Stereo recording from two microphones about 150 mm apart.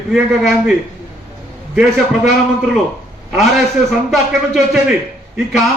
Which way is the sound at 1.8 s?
5° right (ahead or behind).